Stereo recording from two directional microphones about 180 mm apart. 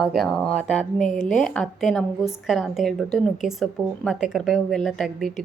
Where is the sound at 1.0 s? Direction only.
45° left (ahead or behind).